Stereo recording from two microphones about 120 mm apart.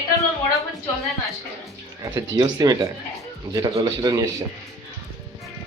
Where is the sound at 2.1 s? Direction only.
30° right (ahead or behind).